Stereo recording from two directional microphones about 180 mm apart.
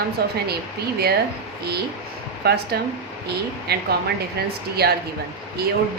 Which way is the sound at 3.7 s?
60° right (ahead or behind).